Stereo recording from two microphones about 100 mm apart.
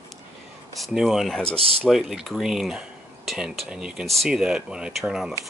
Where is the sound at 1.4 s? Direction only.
70° right (ahead or behind).